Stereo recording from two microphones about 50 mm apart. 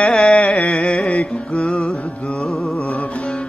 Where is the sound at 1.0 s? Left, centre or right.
Left.